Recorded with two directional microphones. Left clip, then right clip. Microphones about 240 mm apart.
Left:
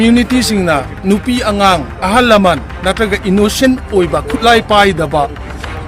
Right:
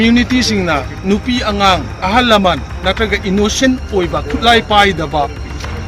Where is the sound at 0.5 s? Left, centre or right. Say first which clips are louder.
Left 2 dB; left.